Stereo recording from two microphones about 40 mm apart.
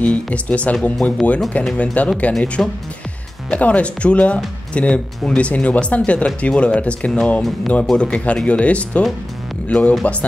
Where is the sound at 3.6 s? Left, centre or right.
Left.